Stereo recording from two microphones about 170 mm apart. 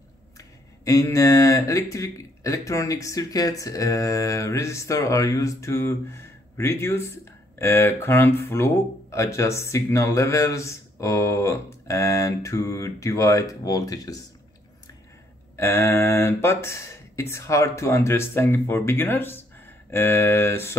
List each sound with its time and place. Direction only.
0.4 s speech: 20° left (ahead or behind)
15.5 s speech: 15° left (ahead or behind)